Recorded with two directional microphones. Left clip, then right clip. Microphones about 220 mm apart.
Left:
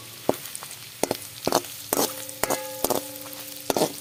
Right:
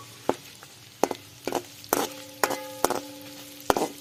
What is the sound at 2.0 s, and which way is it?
Music, 20° left (ahead or behind).